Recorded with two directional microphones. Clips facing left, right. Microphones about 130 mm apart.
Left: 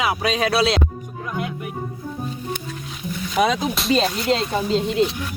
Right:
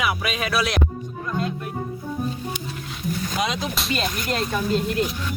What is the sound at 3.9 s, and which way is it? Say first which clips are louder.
Speech: left 9 dB; 30° left (ahead or behind).